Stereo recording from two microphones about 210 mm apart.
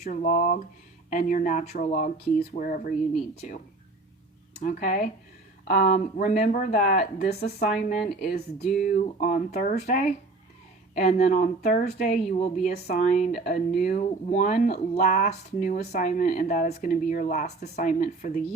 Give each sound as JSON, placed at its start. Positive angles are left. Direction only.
{"t": 0.0, "sound": "speech", "side_deg": 40}
{"t": 4.6, "sound": "speech", "side_deg": 40}
{"t": 7.7, "sound": "speech", "side_deg": 40}